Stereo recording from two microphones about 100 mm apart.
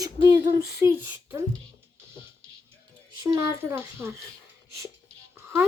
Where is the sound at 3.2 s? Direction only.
40° right (ahead or behind).